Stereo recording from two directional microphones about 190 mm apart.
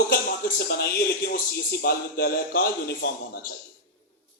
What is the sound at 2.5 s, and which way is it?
Speech, 60° left (ahead or behind).